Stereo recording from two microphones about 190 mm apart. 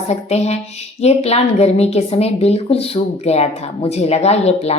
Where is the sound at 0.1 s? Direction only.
35° left (ahead or behind).